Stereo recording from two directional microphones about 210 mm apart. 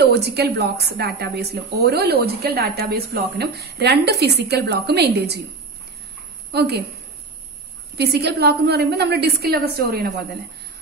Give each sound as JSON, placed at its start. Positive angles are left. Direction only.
{"t": 0.0, "sound": "a woman's voice", "side_deg": -50}
{"t": 6.5, "sound": "a woman's voice", "side_deg": -50}
{"t": 8.0, "sound": "a woman's voice", "side_deg": -50}